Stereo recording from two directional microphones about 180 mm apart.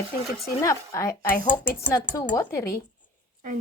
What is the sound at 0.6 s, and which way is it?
Speech, 20° left (ahead or behind).